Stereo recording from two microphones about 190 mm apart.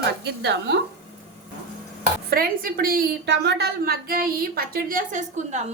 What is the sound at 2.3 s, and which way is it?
A woman's voice, 50° right (ahead or behind).